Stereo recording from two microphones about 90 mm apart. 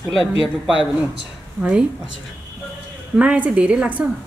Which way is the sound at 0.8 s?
5° right (ahead or behind).